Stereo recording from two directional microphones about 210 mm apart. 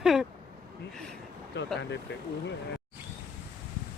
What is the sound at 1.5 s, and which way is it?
Speech, 55° left (ahead or behind).